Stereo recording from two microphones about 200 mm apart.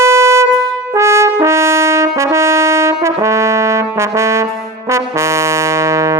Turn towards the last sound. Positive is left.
turn(degrees=-15)  # may be behind; listen again after turning